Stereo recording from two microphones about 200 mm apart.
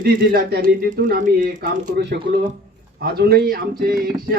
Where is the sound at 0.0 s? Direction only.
45° right (ahead or behind).